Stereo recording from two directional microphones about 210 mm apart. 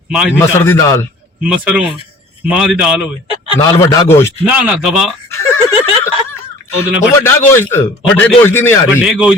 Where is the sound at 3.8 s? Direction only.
15° left (ahead or behind).